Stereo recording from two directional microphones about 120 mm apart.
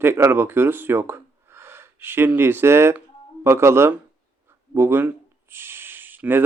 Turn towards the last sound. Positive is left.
turn(degrees=-15)  # may be behind; listen again after turning